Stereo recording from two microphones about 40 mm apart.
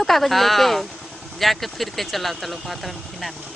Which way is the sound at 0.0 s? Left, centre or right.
Centre.